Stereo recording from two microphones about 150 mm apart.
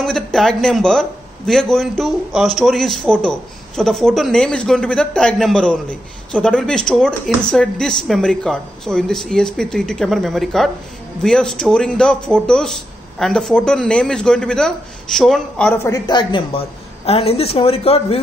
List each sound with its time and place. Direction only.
0.0 s a man's voice: 5° left (ahead or behind)
16.1 s speech: 35° left (ahead or behind)